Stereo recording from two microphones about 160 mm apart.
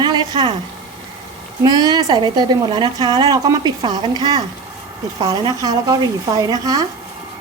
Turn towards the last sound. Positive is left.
turn(degrees=-25)  # may be behind; listen again after turning